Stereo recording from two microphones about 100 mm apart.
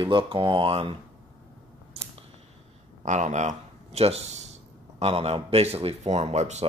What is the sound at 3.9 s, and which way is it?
A man's voice, 90° right.